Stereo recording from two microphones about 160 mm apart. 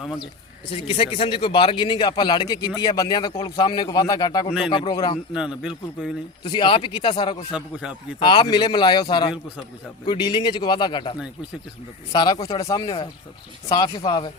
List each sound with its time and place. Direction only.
0.9 s a man's voice: 35° left (ahead or behind)
6.4 s speech: 30° left (ahead or behind)
7.5 s a man's voice: 5° right (ahead or behind)
8.2 s a man's voice: 30° left (ahead or behind)
12.1 s a man's voice: 25° left (ahead or behind)